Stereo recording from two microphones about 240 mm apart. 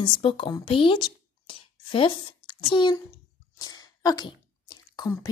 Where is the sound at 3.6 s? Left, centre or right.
Centre.